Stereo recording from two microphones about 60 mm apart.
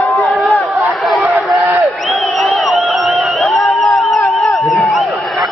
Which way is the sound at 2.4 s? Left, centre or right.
Centre.